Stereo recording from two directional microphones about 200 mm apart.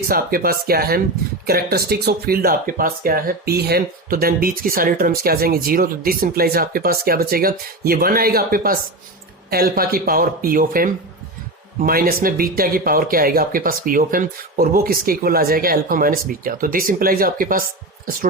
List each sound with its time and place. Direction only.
0.1 s speech: 50° right (ahead or behind)